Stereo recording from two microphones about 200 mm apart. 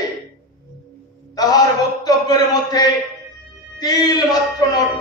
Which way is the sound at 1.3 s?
20° left (ahead or behind).